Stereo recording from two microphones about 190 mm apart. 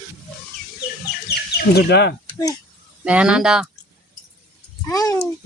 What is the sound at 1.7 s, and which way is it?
Speech, 60° left (ahead or behind).